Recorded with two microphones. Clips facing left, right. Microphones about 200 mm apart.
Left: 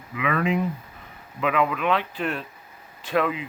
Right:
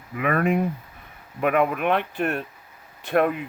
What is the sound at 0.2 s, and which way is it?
Speech, 50° right (ahead or behind).